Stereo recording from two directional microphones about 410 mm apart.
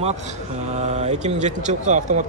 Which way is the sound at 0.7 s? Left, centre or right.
Centre.